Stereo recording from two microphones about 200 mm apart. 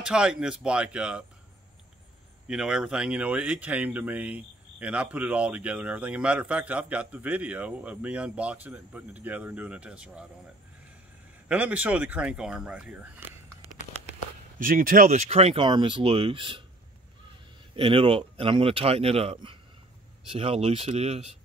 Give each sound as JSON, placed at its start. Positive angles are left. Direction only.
{"t": 0.0, "sound": "speech", "side_deg": -5}
{"t": 2.4, "sound": "speech", "side_deg": -5}
{"t": 11.4, "sound": "speech", "side_deg": -5}
{"t": 14.6, "sound": "speech", "side_deg": -45}
{"t": 17.7, "sound": "speech", "side_deg": -25}